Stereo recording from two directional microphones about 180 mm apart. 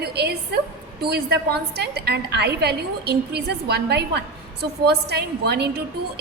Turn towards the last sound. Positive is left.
turn(degrees=-65)  # may be behind; listen again after turning